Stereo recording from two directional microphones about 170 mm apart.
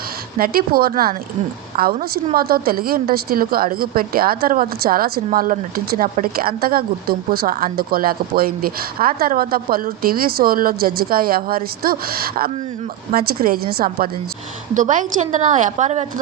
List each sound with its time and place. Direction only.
0.3 s a woman's voice: 60° right (ahead or behind)
14.8 s a woman's voice: 50° right (ahead or behind)